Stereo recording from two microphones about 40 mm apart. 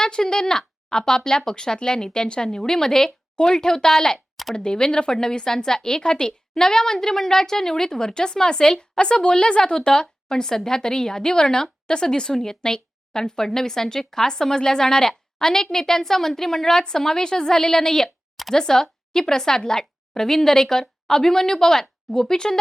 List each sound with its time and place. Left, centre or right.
0.0 s a woman's voice: centre